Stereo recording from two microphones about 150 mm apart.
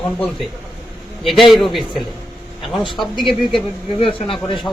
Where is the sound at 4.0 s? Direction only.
35° left (ahead or behind).